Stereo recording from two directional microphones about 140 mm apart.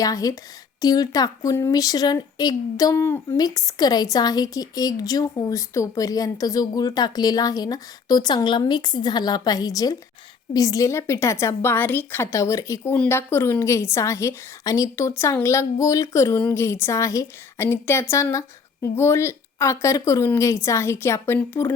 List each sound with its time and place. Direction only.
0.0 s a woman's voice: 25° left (ahead or behind)